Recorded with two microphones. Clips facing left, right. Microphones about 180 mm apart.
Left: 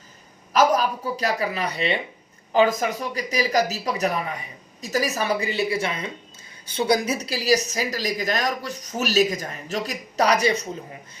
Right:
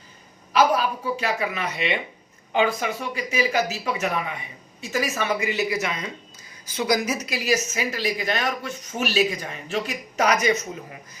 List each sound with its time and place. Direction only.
0.5 s speech: 40° left (ahead or behind)